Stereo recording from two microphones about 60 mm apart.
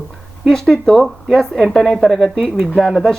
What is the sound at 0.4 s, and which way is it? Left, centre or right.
A woman's voice, centre.